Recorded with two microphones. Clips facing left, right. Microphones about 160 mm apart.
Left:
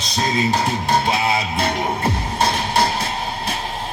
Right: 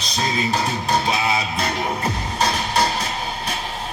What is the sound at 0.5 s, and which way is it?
Speech, 25° left (ahead or behind).